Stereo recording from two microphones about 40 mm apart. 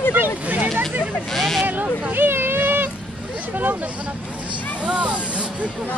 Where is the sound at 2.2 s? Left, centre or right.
Right.